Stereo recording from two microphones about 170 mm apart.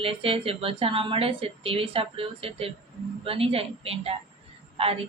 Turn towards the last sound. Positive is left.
turn(degrees=-35)  # may be behind; listen again after turning